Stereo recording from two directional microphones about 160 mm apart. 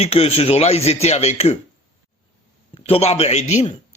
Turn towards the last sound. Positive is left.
turn(degrees=45)  # may be behind; listen again after turning